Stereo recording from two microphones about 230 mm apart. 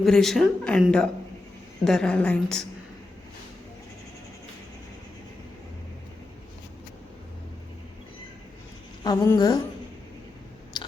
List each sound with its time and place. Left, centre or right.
0.0 s speech: centre
9.0 s a sound: centre
10.8 s chewing: centre